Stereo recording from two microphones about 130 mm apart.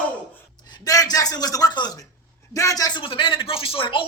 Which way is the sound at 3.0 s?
40° left (ahead or behind).